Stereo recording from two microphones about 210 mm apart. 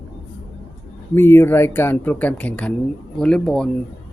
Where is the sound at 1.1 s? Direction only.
10° left (ahead or behind).